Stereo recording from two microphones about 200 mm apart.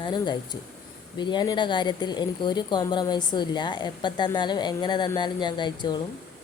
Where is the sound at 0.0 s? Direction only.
20° left (ahead or behind).